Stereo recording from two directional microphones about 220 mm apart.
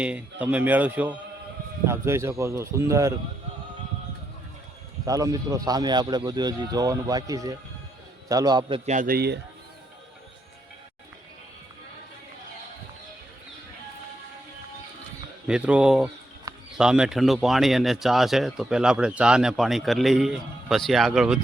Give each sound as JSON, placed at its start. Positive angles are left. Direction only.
{"t": 0.0, "sound": "speech", "side_deg": -5}
{"t": 5.0, "sound": "speech", "side_deg": -15}
{"t": 8.9, "sound": "speech", "side_deg": -40}
{"t": 15.4, "sound": "speech", "side_deg": -5}